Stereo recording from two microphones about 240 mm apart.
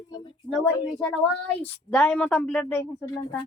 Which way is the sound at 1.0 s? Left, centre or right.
Centre.